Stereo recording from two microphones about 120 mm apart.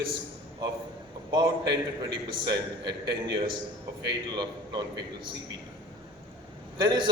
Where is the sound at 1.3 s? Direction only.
35° right (ahead or behind).